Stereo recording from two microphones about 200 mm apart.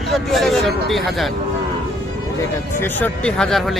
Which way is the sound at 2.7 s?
10° left (ahead or behind).